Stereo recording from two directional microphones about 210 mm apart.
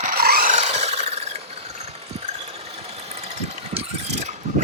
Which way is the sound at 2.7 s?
30° right (ahead or behind).